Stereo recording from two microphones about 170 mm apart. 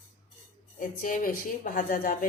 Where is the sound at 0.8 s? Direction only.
55° left (ahead or behind).